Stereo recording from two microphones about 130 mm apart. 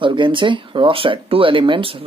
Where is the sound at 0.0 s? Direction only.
40° right (ahead or behind).